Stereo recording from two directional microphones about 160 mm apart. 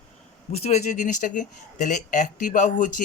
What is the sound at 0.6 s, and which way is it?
Speech, 45° left (ahead or behind).